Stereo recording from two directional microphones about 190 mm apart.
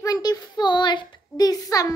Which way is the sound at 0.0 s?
20° left (ahead or behind).